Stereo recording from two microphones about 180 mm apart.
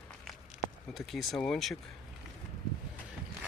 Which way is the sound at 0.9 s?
Centre (ahead or behind).